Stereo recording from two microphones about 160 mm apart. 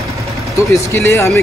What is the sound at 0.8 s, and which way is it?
Speech, 15° left (ahead or behind).